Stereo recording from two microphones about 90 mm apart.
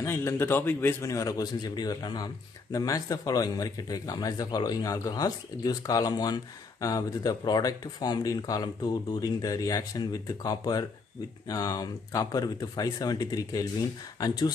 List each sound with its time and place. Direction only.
0.0 s a man's voice: 30° left (ahead or behind)
1.0 s speech: 40° left (ahead or behind)